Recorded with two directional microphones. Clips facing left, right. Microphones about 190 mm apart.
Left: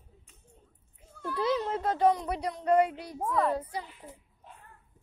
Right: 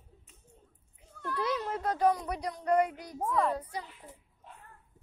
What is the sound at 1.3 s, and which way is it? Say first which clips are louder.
Speech: left 4 dB; 25° left (ahead or behind).